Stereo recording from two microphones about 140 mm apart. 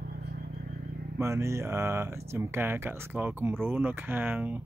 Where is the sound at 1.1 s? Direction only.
20° right (ahead or behind).